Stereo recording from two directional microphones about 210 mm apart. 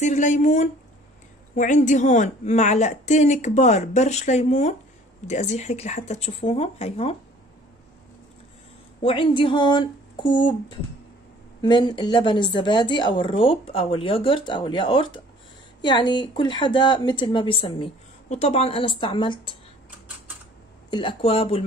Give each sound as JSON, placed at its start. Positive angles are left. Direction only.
{"t": 0.0, "sound": "a woman's voice", "side_deg": 35}
{"t": 9.0, "sound": "a woman's voice", "side_deg": 25}
{"t": 20.9, "sound": "a woman's voice", "side_deg": 25}